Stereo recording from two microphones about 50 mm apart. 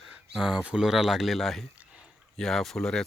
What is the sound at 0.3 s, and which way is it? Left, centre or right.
Speech, centre.